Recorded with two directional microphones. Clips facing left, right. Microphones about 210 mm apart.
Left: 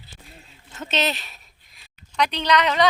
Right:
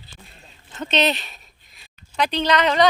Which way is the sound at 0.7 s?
5° left (ahead or behind).